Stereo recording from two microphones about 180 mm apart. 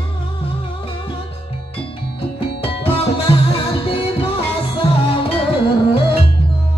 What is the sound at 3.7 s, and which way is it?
Music, 30° left (ahead or behind).